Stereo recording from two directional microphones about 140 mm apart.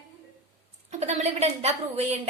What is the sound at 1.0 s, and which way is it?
A woman's voice, 50° right (ahead or behind).